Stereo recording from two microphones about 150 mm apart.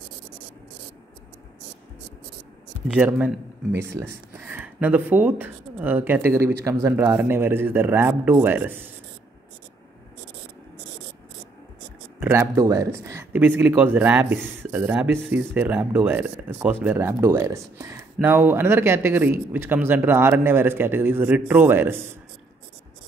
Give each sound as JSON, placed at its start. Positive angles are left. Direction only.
{"t": 2.9, "sound": "speech", "side_deg": -10}
{"t": 12.2, "sound": "speech", "side_deg": -15}